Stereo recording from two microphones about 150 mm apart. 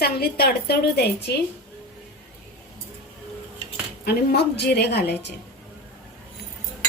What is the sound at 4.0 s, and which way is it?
A woman's voice, 90° left.